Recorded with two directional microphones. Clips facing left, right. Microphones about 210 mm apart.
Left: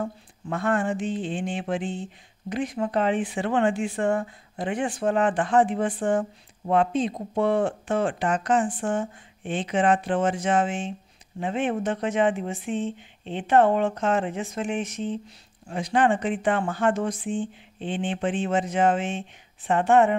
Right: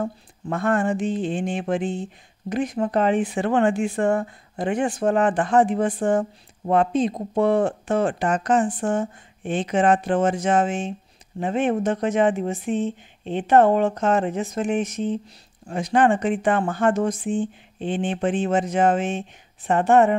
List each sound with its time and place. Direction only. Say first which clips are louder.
0.0 s speech: right 3 dB; 45° right (ahead or behind)